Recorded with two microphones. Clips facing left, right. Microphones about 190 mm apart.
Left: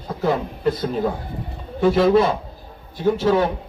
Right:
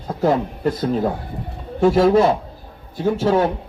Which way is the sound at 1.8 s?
45° right (ahead or behind).